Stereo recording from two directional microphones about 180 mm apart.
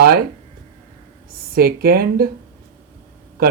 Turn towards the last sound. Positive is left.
turn(degrees=-55)  # may be behind; listen again after turning